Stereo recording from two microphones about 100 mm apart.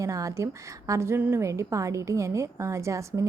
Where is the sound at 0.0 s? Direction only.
35° right (ahead or behind).